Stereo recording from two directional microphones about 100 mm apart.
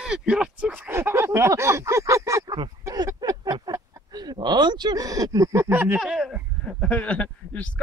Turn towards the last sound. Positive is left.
turn(degrees=15)  # may be behind; listen again after turning